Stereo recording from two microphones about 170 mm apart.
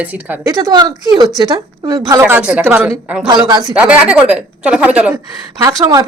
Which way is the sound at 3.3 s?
25° right (ahead or behind).